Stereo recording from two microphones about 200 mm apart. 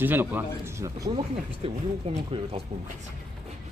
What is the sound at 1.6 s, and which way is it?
Speech, 30° right (ahead or behind).